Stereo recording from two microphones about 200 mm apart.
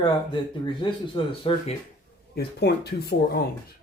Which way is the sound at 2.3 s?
55° left (ahead or behind).